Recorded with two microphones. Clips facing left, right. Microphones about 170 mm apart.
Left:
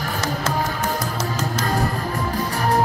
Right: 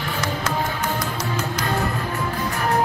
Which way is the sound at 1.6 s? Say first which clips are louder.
Left 2 dB; 35° left (ahead or behind).